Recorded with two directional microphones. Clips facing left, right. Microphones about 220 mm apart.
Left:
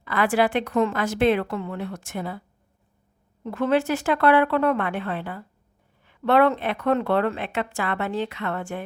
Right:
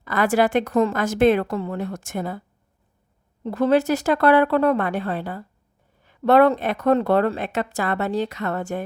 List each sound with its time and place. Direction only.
0.0 s a woman's voice: 45° right (ahead or behind)
3.4 s a woman's voice: 35° right (ahead or behind)